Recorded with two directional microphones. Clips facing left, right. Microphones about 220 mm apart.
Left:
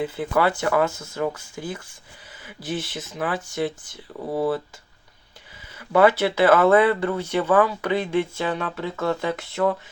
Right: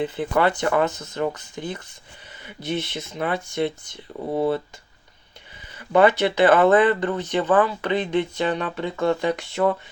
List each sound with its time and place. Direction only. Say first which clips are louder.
0.3 s speech: even; 5° left (ahead or behind)
4.1 s speech: right 1 dB; 20° right (ahead or behind)
5.7 s speech: even; 5° left (ahead or behind)